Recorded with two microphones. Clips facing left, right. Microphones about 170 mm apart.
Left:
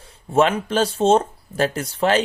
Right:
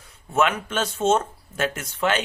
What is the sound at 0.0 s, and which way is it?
Speech, 30° left (ahead or behind).